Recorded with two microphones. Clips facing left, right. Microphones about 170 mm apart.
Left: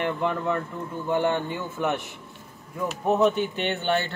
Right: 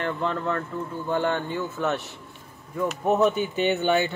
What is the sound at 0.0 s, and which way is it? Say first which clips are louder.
Speech: left 1 dB; 15° left (ahead or behind).